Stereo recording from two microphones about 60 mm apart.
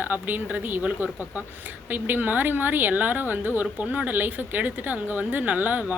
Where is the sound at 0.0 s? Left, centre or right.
Right.